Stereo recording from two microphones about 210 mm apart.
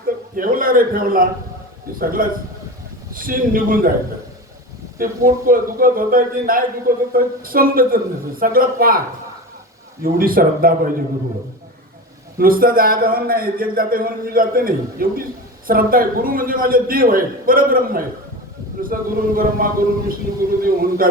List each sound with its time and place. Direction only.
0.3 s a man's voice: 40° right (ahead or behind)
4.9 s a man's voice: 45° right (ahead or behind)
10.0 s a man's voice: 45° right (ahead or behind)
12.4 s a man's voice: 45° right (ahead or behind)